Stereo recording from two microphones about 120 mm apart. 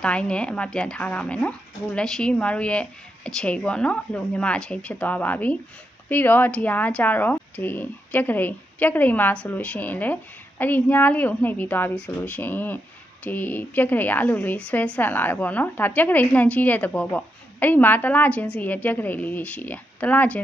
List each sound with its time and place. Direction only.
0.0 s a woman's voice: 10° left (ahead or behind)